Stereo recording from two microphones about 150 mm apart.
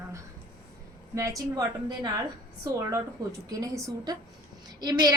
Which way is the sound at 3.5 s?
25° right (ahead or behind).